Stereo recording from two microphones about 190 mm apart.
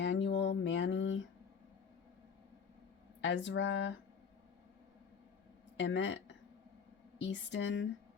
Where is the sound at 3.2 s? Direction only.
70° left (ahead or behind).